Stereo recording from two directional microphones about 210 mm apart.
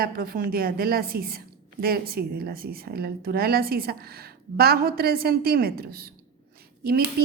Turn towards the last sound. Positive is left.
turn(degrees=-45)  # may be behind; listen again after turning